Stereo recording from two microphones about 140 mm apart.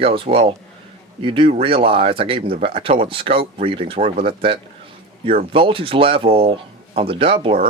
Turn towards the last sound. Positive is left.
turn(degrees=-40)  # may be behind; listen again after turning